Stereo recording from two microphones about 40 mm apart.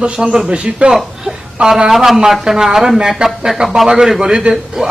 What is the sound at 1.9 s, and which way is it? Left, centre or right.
A man's voice, centre.